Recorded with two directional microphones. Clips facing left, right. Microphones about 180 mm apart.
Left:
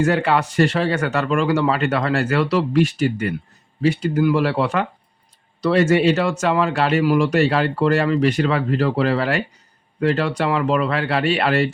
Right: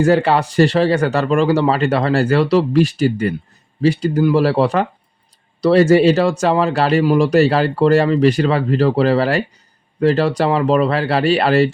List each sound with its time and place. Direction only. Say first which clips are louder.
0.0 s a man's voice: right 4 dB; 30° right (ahead or behind)